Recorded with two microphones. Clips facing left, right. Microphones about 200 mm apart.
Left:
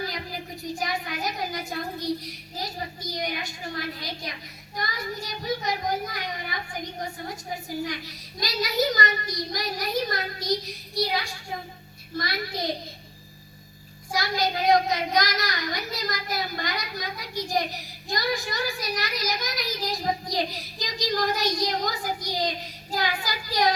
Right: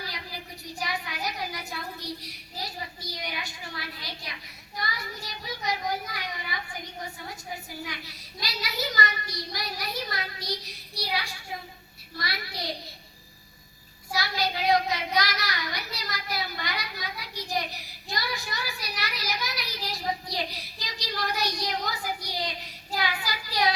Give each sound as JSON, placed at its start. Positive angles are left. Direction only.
{"t": 0.0, "sound": "child singing", "side_deg": 45}
{"t": 2.6, "sound": "speech", "side_deg": 45}
{"t": 7.9, "sound": "speech", "side_deg": 45}
{"t": 14.1, "sound": "speech", "side_deg": 45}